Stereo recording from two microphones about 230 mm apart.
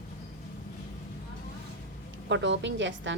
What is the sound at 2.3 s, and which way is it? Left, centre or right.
Speech, right.